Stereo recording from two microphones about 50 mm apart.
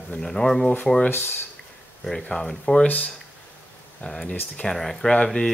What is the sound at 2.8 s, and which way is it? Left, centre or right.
Speech, left.